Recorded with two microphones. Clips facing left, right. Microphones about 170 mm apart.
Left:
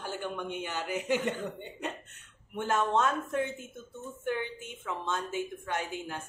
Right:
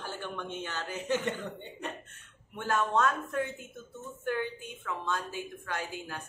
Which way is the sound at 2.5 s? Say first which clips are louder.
Left 1 dB; 20° left (ahead or behind).